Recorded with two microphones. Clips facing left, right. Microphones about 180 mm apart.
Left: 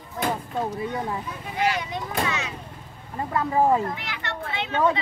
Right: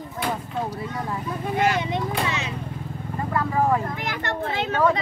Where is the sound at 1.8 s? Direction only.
25° right (ahead or behind).